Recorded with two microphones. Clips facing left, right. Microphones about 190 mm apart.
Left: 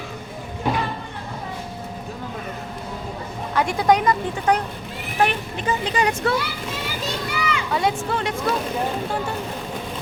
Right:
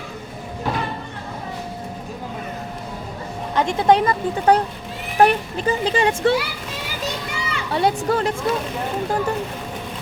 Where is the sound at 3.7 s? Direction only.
25° right (ahead or behind).